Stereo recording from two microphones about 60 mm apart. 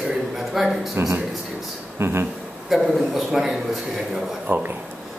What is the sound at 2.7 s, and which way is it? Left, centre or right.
A man's voice, centre.